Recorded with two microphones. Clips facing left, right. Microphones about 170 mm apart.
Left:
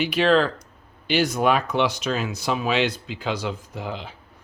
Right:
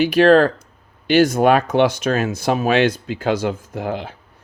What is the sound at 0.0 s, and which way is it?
Speech, 45° right (ahead or behind).